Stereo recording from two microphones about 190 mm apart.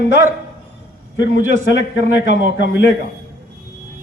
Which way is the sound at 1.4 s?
40° right (ahead or behind).